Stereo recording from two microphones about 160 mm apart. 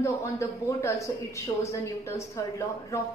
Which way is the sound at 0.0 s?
15° left (ahead or behind).